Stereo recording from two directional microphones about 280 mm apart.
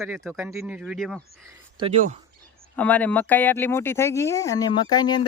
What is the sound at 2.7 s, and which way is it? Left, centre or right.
Speech, centre.